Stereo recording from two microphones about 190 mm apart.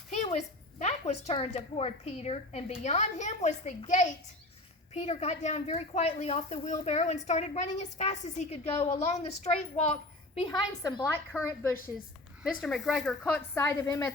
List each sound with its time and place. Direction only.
0.1 s a sound: 35° left (ahead or behind)
0.8 s speech: 35° left (ahead or behind); by 11.3 s 15° left (ahead or behind)
12.4 s speech: centre (ahead or behind); by 14.1 s 15° left (ahead or behind)